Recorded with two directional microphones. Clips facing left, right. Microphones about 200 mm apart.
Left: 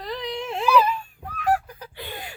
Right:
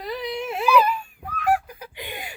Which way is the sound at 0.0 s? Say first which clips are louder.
Right 1 dB; 10° right (ahead or behind).